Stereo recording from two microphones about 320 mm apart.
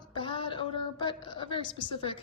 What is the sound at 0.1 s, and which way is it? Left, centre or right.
A woman's voice, centre.